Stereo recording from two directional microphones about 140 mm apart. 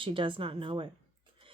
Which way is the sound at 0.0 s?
40° right (ahead or behind).